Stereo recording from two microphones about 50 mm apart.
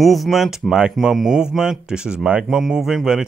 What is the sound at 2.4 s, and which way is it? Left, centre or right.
Speech, centre.